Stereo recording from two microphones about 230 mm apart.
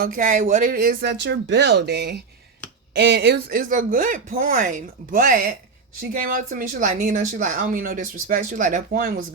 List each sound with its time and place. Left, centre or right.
0.0 s speech: right